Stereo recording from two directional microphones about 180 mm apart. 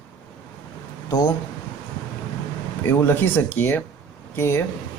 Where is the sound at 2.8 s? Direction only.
10° left (ahead or behind).